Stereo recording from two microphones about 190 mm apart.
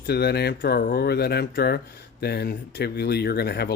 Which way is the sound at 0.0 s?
55° left (ahead or behind).